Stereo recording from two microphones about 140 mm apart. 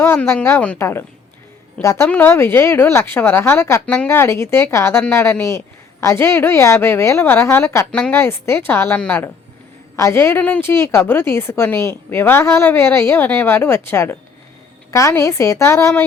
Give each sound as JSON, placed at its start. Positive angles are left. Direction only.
{"t": 0.0, "sound": "a woman's voice", "side_deg": 20}
{"t": 7.9, "sound": "a woman's voice", "side_deg": 5}
{"t": 8.1, "sound": "a woman's voice", "side_deg": 20}